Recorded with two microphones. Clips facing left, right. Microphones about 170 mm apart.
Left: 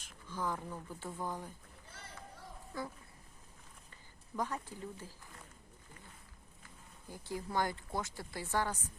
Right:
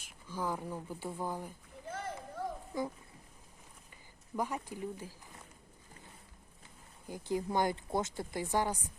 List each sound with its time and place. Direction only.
0.0 s speech: 10° right (ahead or behind)
1.9 s run: 50° right (ahead or behind)
2.7 s speech: 15° right (ahead or behind)
4.4 s speech: 10° right (ahead or behind)
7.1 s speech: 20° right (ahead or behind)